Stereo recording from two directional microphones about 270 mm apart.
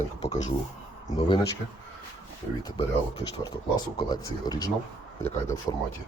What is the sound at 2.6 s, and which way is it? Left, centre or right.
Speech, centre.